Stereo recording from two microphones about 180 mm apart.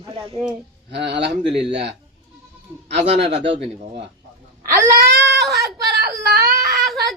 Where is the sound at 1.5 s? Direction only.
5° right (ahead or behind).